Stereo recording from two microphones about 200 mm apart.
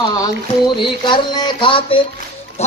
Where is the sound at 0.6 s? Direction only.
20° left (ahead or behind).